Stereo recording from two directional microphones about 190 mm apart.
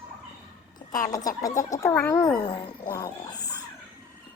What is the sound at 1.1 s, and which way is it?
Speech, 20° left (ahead or behind).